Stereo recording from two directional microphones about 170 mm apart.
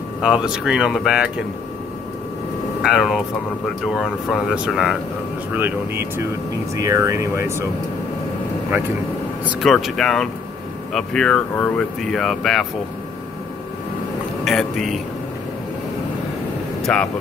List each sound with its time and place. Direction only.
0.2 s speech: 5° right (ahead or behind)
2.8 s speech: 5° right (ahead or behind)
9.5 s speech: centre (ahead or behind)
14.4 s a man's voice: centre (ahead or behind)
16.8 s speech: 5° left (ahead or behind)